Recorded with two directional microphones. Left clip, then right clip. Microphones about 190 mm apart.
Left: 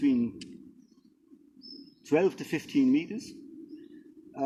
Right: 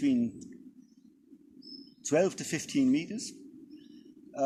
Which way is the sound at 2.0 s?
30° right (ahead or behind).